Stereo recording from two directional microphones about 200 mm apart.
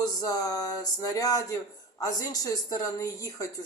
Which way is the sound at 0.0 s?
20° left (ahead or behind).